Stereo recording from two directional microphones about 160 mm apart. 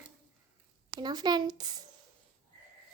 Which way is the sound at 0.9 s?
25° right (ahead or behind).